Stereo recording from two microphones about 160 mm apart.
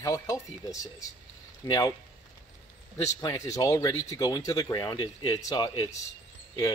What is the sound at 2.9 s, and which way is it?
Speech, 20° left (ahead or behind).